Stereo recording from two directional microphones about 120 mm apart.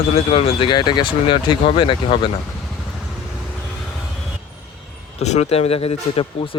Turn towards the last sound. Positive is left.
turn(degrees=50)  # may be behind; listen again after turning